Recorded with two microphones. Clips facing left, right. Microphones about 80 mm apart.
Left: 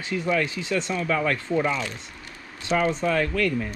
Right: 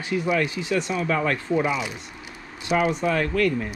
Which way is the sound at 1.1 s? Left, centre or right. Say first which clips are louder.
Even; right.